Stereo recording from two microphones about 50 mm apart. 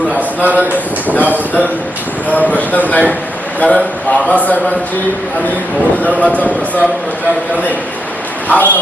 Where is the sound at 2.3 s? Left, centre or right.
Left.